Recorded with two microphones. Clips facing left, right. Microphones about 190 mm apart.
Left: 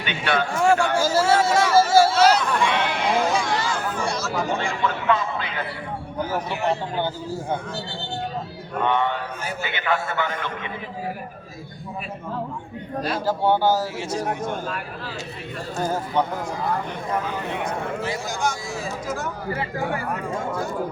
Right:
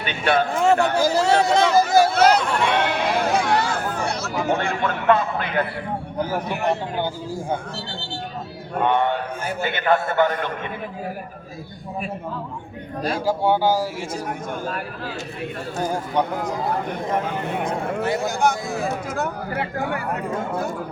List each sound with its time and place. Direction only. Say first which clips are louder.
0.0 s a man's voice: right 3 dB; 40° right (ahead or behind)
0.6 s speech: even; 20° right (ahead or behind)
2.1 s a sound: right 1 dB; 55° right (ahead or behind)
2.6 s sheep: right 2 dB; 60° right (ahead or behind)
6.7 s speech: right 1 dB; 15° right (ahead or behind)
8.8 s a man's voice: right 2 dB; 50° right (ahead or behind)
13.1 s speech: right 1 dB; 10° right (ahead or behind)
14.1 s a man's voice: left 2 dB; 50° right (ahead or behind)
15.8 s speech: even; 15° right (ahead or behind)
18.0 s a man's voice: right 8 dB; 60° right (ahead or behind)